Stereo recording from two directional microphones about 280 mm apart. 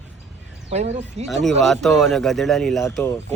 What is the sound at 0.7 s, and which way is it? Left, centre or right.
Speech, right.